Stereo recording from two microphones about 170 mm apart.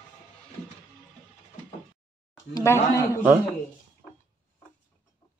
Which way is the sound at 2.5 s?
15° left (ahead or behind).